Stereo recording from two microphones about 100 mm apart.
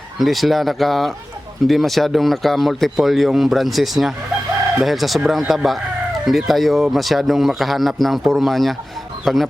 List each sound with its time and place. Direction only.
0.2 s speech: centre (ahead or behind)